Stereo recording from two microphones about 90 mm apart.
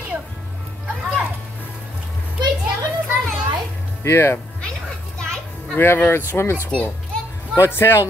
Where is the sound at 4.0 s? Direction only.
30° left (ahead or behind).